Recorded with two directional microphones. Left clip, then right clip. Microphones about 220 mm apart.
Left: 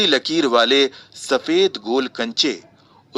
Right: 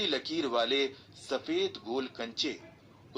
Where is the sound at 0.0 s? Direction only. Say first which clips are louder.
Left 15 dB; 50° left (ahead or behind).